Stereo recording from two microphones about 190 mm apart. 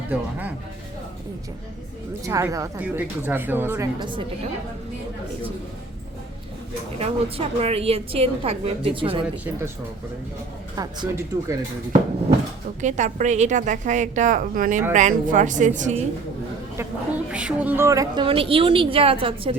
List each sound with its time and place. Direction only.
0.1 s a woman's voice: 10° right (ahead or behind)
2.2 s a woman's voice: 15° right (ahead or behind)
7.0 s a woman's voice: 30° right (ahead or behind)
10.8 s a woman's voice: 20° right (ahead or behind)
12.8 s a woman's voice: 40° right (ahead or behind)
17.3 s a woman's voice: 5° right (ahead or behind); by 19.5 s 30° right (ahead or behind)